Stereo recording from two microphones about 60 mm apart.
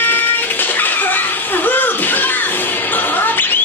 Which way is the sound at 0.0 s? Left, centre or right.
Left.